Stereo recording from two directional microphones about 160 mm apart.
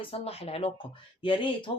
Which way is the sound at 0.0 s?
35° left (ahead or behind).